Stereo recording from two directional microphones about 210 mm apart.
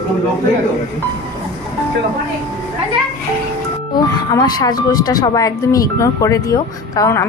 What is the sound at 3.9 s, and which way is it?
A woman's voice, 15° left (ahead or behind).